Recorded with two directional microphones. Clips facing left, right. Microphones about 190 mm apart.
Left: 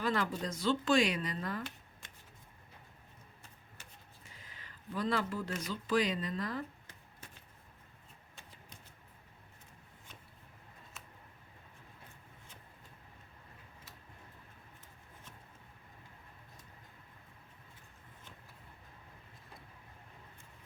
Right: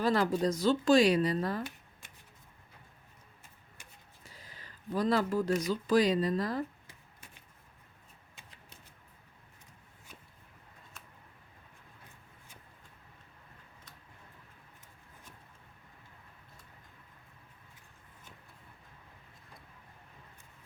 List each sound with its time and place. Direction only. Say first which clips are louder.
0.0 s speech: right 7 dB; 35° right (ahead or behind)
4.2 s speech: right 5 dB; 35° right (ahead or behind)